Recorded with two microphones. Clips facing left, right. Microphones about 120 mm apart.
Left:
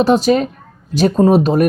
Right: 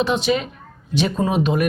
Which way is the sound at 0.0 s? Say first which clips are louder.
Left 7 dB; 40° left (ahead or behind).